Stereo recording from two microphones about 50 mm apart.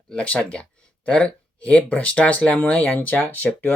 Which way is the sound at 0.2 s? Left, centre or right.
Left.